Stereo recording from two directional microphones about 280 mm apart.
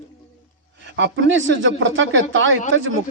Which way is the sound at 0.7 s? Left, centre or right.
Right.